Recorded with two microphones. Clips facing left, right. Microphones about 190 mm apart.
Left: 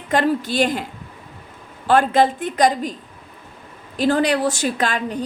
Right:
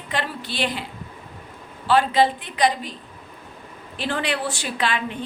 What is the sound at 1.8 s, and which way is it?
A woman's voice, 50° left (ahead or behind).